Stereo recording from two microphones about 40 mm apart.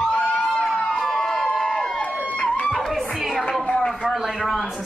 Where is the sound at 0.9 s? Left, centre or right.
Centre.